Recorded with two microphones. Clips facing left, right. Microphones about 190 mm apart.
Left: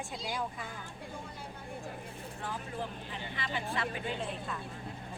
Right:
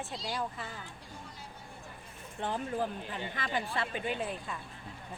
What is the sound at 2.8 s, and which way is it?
Speech, 45° right (ahead or behind).